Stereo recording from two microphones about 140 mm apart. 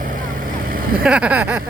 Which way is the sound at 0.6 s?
90° right.